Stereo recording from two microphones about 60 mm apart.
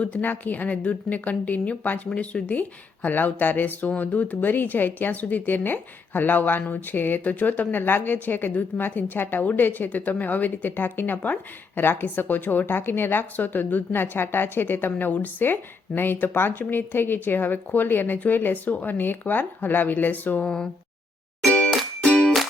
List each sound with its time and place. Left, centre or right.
0.2 s a woman's voice: left
21.4 s music: centre